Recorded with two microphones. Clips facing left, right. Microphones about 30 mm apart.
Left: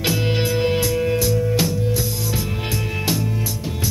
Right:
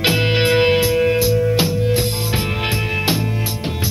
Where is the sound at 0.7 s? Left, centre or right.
Right.